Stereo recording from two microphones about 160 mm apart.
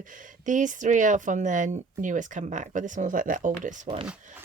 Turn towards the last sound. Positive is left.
turn(degrees=-5)  # may be behind; listen again after turning